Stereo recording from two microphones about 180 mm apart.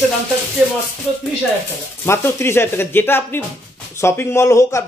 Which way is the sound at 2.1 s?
15° left (ahead or behind).